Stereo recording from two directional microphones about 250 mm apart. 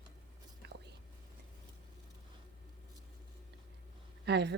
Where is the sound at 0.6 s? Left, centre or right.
Right.